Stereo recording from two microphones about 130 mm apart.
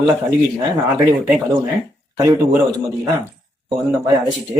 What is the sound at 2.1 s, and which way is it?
Speech, 25° right (ahead or behind).